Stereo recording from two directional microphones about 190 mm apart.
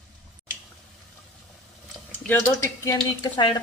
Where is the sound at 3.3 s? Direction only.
20° left (ahead or behind).